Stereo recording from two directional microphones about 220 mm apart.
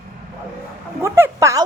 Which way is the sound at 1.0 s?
15° right (ahead or behind).